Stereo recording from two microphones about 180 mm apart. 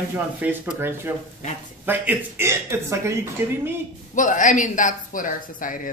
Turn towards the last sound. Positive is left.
turn(degrees=50)  # may be behind; listen again after turning